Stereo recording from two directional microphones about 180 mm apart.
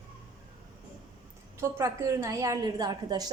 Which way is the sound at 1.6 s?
15° right (ahead or behind).